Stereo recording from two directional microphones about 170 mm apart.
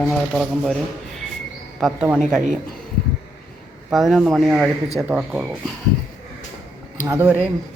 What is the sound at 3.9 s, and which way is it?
Speech, centre (ahead or behind).